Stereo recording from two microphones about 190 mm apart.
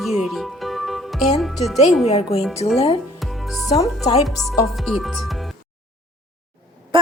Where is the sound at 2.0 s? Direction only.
35° left (ahead or behind).